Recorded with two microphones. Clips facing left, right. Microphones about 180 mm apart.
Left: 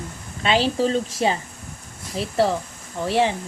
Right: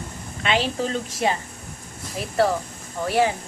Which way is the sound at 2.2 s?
30° left (ahead or behind).